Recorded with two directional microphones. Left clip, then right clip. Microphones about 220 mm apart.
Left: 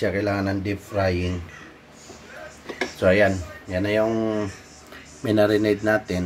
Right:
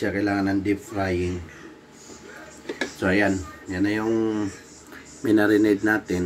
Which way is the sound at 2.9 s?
45° left (ahead or behind).